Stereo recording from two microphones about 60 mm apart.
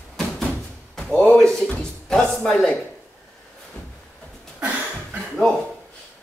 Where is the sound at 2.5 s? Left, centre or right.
Centre.